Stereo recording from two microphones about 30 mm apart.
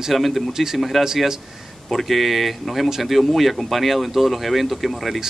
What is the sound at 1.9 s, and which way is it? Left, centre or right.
Speech, centre.